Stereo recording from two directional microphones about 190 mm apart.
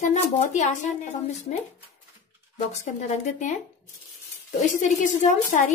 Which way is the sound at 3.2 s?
40° left (ahead or behind).